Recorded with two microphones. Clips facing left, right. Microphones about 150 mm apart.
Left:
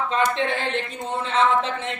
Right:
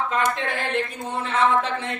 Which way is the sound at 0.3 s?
25° left (ahead or behind).